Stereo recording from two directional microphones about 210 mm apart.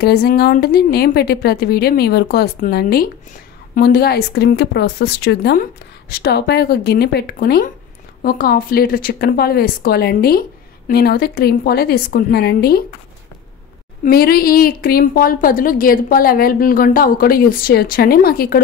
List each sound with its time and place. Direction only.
0.0 s a woman's voice: 50° left (ahead or behind)
14.0 s a woman's voice: 45° left (ahead or behind)